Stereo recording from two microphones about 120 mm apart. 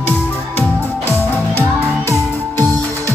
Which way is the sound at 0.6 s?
20° left (ahead or behind).